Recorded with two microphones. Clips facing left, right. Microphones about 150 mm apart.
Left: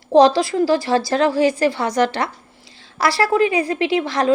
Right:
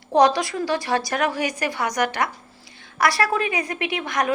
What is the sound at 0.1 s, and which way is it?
A woman's voice, 25° left (ahead or behind).